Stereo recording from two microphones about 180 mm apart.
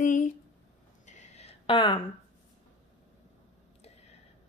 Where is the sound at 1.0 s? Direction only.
35° left (ahead or behind).